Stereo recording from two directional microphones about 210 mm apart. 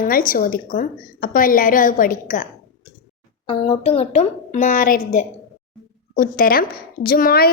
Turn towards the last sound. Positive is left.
turn(degrees=45)  # may be behind; listen again after turning